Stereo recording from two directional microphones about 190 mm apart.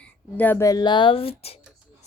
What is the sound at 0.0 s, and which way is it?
Speech, 10° left (ahead or behind).